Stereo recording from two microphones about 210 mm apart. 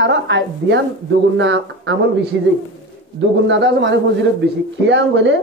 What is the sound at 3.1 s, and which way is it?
Speech, 55° right (ahead or behind).